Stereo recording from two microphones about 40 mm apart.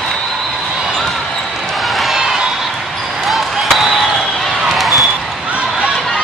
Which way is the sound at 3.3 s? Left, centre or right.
Centre.